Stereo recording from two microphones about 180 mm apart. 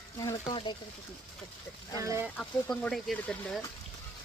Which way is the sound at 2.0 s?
15° right (ahead or behind).